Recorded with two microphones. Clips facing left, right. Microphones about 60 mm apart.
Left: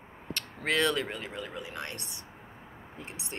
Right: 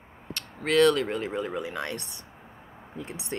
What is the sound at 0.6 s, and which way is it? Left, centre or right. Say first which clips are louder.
Speech: right 7 dB; left.